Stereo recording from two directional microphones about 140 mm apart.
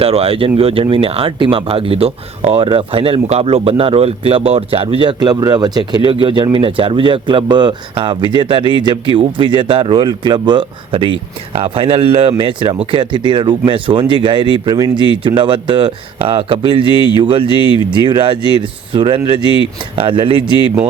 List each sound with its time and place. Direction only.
0.0 s speech: 45° right (ahead or behind)
16.9 s speech: 35° left (ahead or behind)
17.2 s speech: 35° right (ahead or behind)